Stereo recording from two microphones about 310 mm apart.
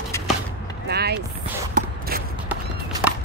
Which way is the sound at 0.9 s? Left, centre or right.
Right.